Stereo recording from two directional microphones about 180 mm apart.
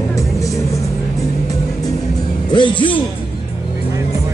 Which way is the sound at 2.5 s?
25° left (ahead or behind).